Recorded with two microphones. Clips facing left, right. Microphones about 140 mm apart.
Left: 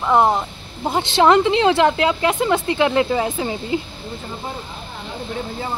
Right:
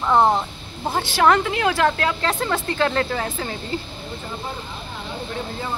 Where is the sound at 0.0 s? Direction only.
10° left (ahead or behind).